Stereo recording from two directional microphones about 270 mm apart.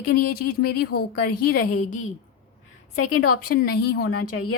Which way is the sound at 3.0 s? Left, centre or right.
Left.